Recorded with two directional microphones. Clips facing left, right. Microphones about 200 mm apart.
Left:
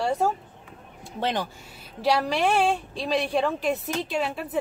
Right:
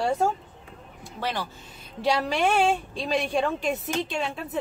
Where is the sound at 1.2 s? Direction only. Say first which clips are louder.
Left 3 dB; 20° left (ahead or behind).